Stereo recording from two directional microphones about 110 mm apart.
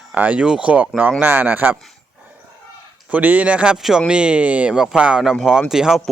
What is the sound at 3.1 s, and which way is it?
Speech, 15° right (ahead or behind).